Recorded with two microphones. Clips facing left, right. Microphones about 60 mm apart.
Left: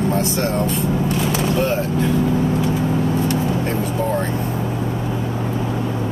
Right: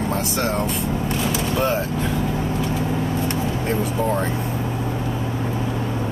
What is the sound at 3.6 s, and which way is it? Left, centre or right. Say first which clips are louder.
Speech: left 1 dB; centre.